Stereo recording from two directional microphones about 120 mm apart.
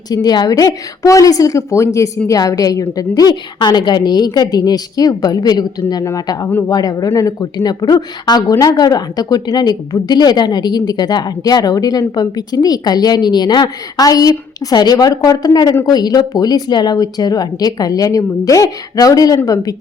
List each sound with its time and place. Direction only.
0.1 s speech: 35° left (ahead or behind)